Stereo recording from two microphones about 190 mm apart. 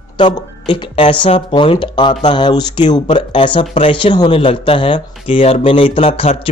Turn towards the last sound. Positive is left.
turn(degrees=30)  # may be behind; listen again after turning